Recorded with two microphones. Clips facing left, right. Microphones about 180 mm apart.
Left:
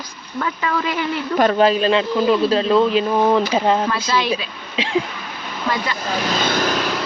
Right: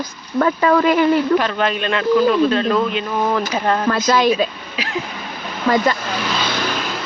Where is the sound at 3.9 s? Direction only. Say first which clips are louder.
Right 5 dB; 45° right (ahead or behind).